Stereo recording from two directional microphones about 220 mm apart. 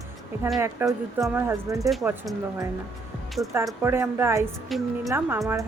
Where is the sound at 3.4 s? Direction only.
15° right (ahead or behind).